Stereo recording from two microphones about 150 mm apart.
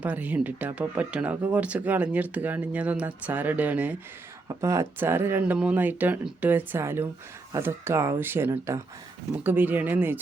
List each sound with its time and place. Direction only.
0.0 s speech: 10° right (ahead or behind)
4.4 s speech: 20° right (ahead or behind)